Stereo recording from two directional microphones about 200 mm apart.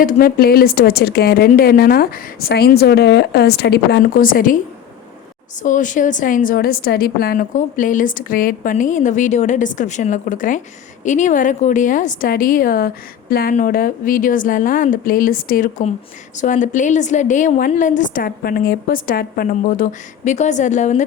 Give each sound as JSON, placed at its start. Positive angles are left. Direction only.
{"t": 0.0, "sound": "speech", "side_deg": 45}
{"t": 5.6, "sound": "a woman's voice", "side_deg": 40}